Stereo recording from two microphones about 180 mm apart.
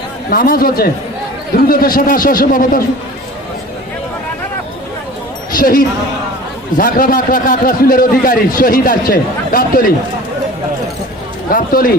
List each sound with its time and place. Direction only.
0.3 s a man's voice: 55° left (ahead or behind)
5.5 s a sound: 50° left (ahead or behind)
6.7 s a man's voice: 50° left (ahead or behind)
11.5 s a man's voice: 50° left (ahead or behind)